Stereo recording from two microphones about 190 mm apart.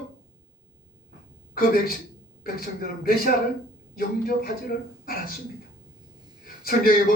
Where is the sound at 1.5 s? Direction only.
50° left (ahead or behind).